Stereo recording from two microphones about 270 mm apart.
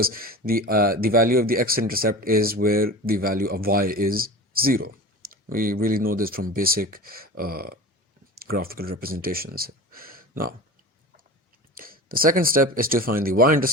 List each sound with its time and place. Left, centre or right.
0.0 s speech: right
11.8 s speech: right